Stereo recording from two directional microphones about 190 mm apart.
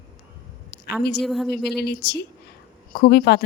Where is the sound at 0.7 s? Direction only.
55° left (ahead or behind).